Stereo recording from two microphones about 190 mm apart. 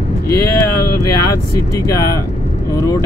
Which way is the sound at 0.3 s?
15° left (ahead or behind).